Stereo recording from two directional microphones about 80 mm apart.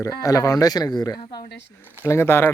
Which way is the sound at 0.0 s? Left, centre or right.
Left.